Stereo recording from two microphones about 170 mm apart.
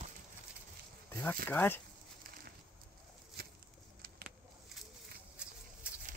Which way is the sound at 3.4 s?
65° right (ahead or behind).